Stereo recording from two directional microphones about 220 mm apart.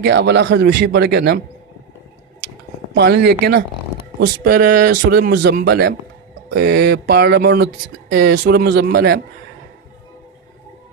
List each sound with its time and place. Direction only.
0.0 s speech: 50° right (ahead or behind)
2.9 s speech: 50° right (ahead or behind)